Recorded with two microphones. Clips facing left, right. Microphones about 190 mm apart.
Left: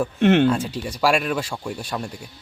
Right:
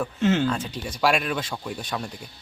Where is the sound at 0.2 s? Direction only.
65° left (ahead or behind).